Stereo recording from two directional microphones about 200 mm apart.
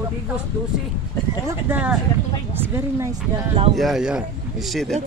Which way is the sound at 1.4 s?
10° right (ahead or behind).